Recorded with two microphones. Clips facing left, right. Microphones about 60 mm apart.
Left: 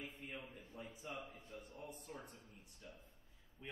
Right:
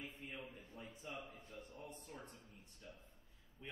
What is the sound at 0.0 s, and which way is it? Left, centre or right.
A man's voice, centre.